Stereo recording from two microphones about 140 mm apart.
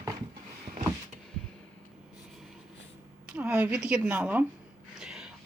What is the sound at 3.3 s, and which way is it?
Speech, 10° right (ahead or behind).